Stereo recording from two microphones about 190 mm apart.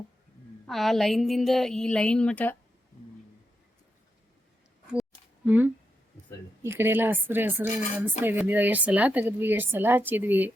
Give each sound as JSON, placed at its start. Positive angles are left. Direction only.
{"t": 0.7, "sound": "a woman's voice", "side_deg": 0}
{"t": 5.5, "sound": "a woman's voice", "side_deg": -10}